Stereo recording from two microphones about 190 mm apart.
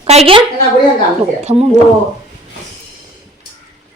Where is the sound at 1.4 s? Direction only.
30° right (ahead or behind).